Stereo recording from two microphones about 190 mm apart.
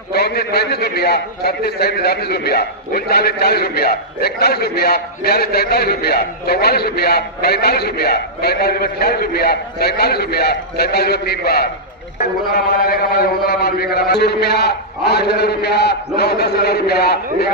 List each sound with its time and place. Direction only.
0.1 s a man's voice: 55° left (ahead or behind)